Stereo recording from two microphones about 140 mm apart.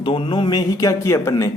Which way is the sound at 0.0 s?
35° left (ahead or behind).